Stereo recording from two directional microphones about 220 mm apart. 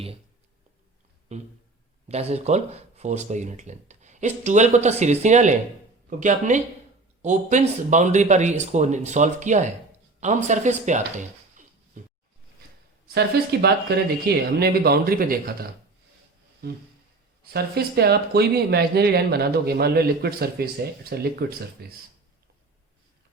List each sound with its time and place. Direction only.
1.3 s speech: 30° right (ahead or behind)
13.5 s speech: 45° right (ahead or behind)